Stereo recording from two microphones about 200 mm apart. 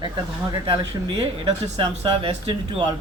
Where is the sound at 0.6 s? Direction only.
25° right (ahead or behind).